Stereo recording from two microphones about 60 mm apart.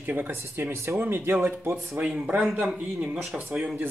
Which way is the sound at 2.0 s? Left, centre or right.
Right.